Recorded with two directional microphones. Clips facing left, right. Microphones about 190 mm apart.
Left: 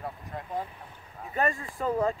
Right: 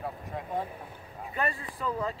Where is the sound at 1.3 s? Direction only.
45° left (ahead or behind).